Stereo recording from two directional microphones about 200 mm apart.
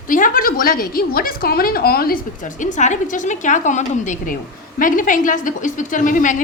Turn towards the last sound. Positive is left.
turn(degrees=40)  # may be behind; listen again after turning